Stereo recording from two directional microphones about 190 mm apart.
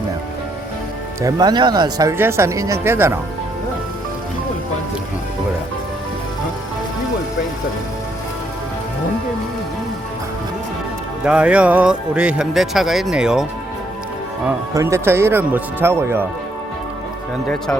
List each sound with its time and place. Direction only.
1.2 s speech: 20° right (ahead or behind)
11.3 s speech: 5° right (ahead or behind)
14.7 s speech: 15° right (ahead or behind)